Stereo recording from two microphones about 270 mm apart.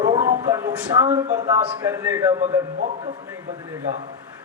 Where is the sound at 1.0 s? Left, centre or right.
Right.